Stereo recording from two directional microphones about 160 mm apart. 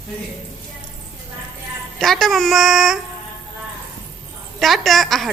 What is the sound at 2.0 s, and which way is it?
Speech, centre (ahead or behind).